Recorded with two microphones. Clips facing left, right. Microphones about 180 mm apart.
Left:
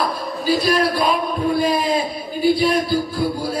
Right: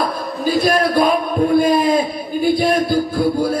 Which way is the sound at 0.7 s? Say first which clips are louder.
Right 5 dB; 50° right (ahead or behind).